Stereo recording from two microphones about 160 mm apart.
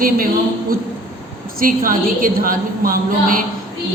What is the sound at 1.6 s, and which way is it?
A woman's voice, 60° right (ahead or behind).